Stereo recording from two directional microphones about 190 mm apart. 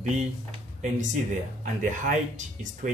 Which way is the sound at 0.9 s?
40° right (ahead or behind).